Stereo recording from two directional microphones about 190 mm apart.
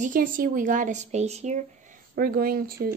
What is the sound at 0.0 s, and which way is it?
Speech, 45° right (ahead or behind).